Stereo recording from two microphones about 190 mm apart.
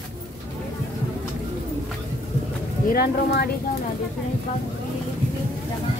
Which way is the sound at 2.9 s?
55° left (ahead or behind).